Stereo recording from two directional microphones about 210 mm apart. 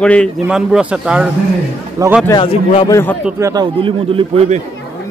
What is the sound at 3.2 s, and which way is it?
Speech, 15° right (ahead or behind).